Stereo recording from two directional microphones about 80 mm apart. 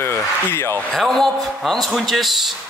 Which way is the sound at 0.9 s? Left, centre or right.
Centre.